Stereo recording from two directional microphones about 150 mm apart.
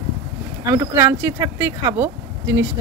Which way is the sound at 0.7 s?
20° right (ahead or behind).